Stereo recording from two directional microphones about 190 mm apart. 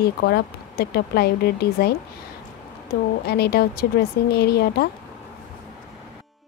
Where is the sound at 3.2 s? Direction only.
60° left (ahead or behind).